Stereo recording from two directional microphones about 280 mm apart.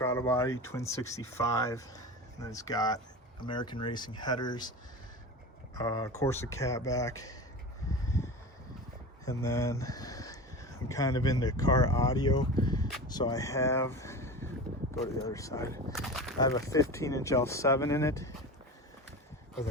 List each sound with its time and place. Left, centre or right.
0.0 s speech: centre
5.7 s speech: centre
9.2 s speech: centre
12.6 s a sound: centre
13.1 s speech: centre
15.9 s speech: centre
16.4 s speech: centre